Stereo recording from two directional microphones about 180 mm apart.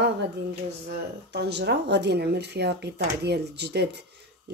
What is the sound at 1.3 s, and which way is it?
Speech, 65° right (ahead or behind).